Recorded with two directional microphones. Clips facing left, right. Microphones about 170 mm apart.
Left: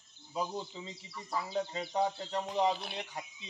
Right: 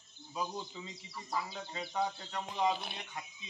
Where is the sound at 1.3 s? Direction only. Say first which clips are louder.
Left 5 dB; 30° left (ahead or behind).